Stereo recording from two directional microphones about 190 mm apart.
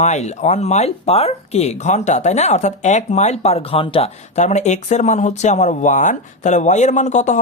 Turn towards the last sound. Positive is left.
turn(degrees=40)  # may be behind; listen again after turning